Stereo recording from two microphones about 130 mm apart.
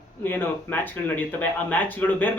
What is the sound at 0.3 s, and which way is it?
Speech, 15° left (ahead or behind).